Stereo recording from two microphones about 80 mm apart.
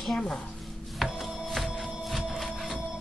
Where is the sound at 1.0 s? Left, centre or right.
Centre.